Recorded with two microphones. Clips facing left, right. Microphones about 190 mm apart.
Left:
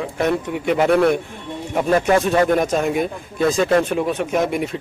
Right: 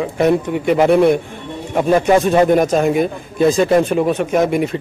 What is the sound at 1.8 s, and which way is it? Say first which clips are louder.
Speech: right 4 dB; 15° right (ahead or behind).